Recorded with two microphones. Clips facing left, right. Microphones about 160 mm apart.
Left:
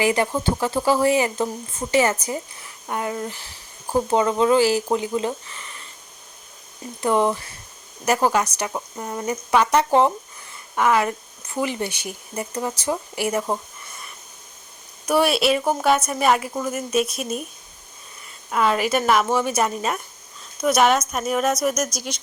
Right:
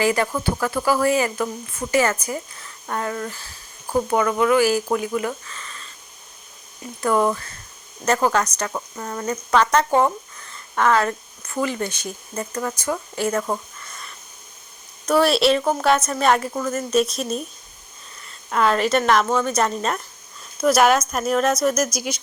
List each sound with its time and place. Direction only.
0.0 s speech: 20° left (ahead or behind)
7.0 s speech: 20° left (ahead or behind)
15.2 s speech: 5° left (ahead or behind)
18.5 s speech: 5° left (ahead or behind)
21.9 s speech: 10° right (ahead or behind)